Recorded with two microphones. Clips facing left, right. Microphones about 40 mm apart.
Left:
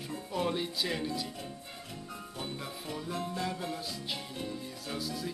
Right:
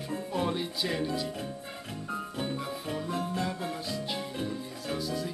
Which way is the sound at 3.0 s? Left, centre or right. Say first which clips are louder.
Right 3 dB; right.